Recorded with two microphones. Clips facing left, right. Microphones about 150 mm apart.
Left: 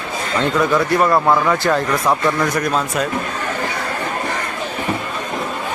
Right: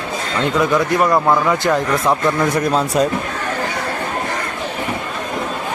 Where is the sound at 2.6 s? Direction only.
25° right (ahead or behind).